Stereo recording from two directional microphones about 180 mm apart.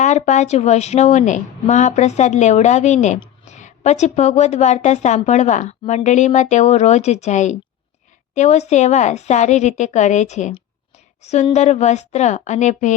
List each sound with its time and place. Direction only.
0.0 s a woman's voice: 40° left (ahead or behind)